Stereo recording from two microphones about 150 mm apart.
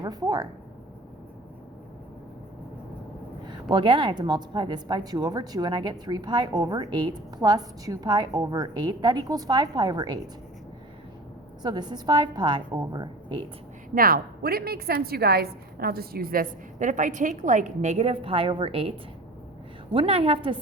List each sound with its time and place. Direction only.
0.0 s a woman's voice: 25° right (ahead or behind)
3.4 s a woman's voice: 30° right (ahead or behind)
11.6 s a woman's voice: 30° right (ahead or behind)
13.9 s a woman's voice: 75° right (ahead or behind); by 20.6 s 35° right (ahead or behind)